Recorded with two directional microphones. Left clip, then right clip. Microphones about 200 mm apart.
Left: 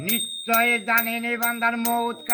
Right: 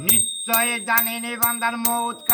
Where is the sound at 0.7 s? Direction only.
15° right (ahead or behind).